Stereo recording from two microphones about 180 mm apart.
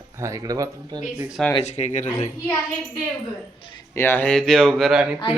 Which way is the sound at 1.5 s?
40° left (ahead or behind).